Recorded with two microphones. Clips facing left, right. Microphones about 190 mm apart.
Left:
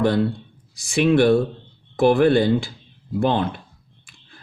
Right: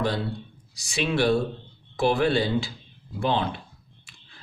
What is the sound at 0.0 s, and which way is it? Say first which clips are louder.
Speech: left 8 dB; 55° left (ahead or behind).